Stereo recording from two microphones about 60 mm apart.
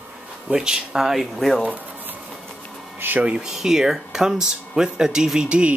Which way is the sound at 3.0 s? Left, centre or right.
Right.